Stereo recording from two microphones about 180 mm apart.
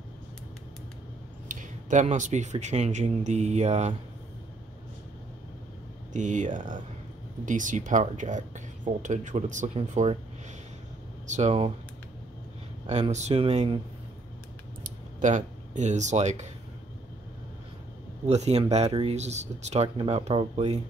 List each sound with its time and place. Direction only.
1.5 s speech: 45° right (ahead or behind)
6.1 s speech: 45° right (ahead or behind)
11.2 s speech: 40° right (ahead or behind)
13.1 s speech: 40° right (ahead or behind)
14.8 s a sound: 45° right (ahead or behind)
18.2 s speech: 40° right (ahead or behind)